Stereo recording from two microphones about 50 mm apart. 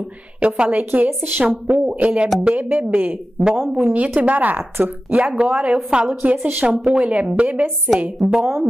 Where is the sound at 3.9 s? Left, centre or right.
Right.